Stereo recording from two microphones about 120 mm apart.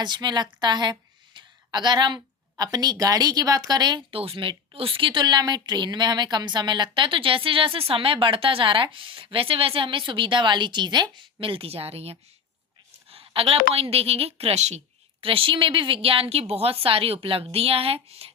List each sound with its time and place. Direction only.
0.0 s a woman's voice: 35° right (ahead or behind)
4.2 s a woman's voice: 50° right (ahead or behind); by 14.8 s 65° right (ahead or behind)
15.2 s a woman's voice: 50° right (ahead or behind)